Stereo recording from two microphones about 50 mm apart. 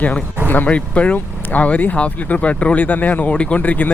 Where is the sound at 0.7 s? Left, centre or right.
Left.